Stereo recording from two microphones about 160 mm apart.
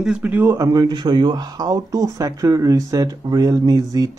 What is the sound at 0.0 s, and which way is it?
Speech, 5° right (ahead or behind).